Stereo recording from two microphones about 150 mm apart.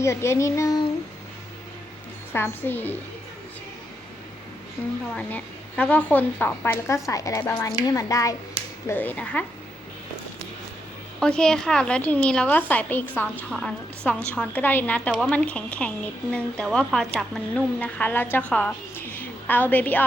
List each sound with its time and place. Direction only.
0.0 s speech: 20° left (ahead or behind)
2.3 s speech: 15° left (ahead or behind)
5.1 s speech: 10° left (ahead or behind)
11.2 s a woman's voice: 5° left (ahead or behind)